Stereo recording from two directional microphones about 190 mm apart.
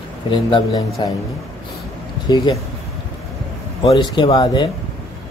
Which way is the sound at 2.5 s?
25° left (ahead or behind).